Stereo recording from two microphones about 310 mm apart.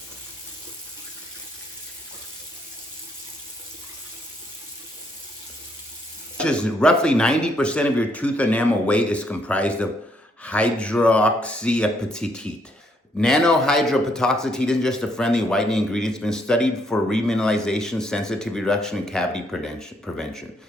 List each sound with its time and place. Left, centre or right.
6.3 s speech: centre